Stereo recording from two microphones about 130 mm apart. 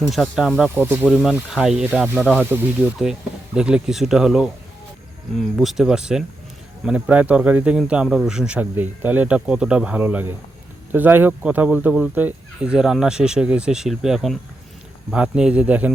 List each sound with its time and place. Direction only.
0.0 s speech: centre (ahead or behind)
0.8 s speech: 15° right (ahead or behind)
1.1 s speech: centre (ahead or behind)
2.2 s speech: 5° left (ahead or behind)
3.0 s speech: 5° right (ahead or behind)